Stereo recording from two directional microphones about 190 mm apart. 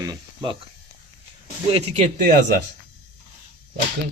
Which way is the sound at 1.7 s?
30° right (ahead or behind).